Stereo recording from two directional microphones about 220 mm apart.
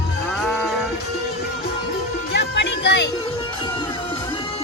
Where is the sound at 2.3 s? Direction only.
50° left (ahead or behind).